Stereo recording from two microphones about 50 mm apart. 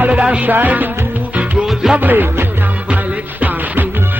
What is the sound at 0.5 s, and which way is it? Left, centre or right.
Music, right.